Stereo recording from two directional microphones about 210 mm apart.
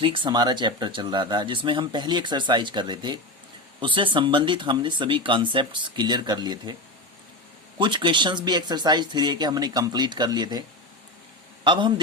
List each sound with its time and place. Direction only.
0.0 s speech: 25° right (ahead or behind)
7.8 s speech: 20° right (ahead or behind)
11.6 s a man's voice: 20° right (ahead or behind)